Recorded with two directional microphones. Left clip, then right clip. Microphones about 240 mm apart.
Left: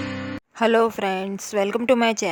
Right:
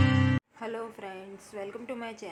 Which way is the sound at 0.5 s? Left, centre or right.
Left.